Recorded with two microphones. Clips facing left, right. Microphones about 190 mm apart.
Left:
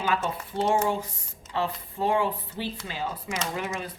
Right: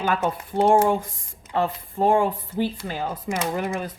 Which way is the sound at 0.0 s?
50° right (ahead or behind).